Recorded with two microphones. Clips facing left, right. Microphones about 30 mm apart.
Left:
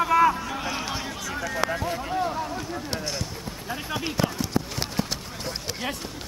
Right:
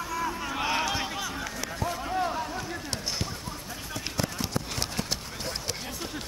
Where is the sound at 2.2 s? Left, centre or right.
Centre.